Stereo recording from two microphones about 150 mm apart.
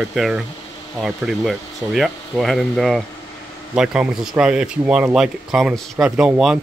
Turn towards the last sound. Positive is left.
turn(degrees=-5)  # may be behind; listen again after turning